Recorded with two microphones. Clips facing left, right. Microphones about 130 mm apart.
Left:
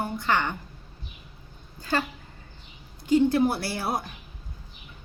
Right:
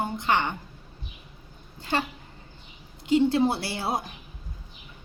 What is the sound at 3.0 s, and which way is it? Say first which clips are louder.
A woman's voice: left 1 dB; 25° right (ahead or behind).